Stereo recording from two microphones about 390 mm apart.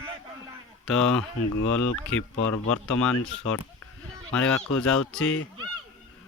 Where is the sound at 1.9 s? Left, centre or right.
Left.